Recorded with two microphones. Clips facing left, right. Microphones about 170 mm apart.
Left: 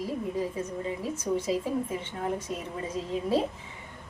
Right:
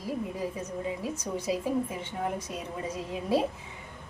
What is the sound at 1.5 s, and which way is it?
Speech, 20° right (ahead or behind).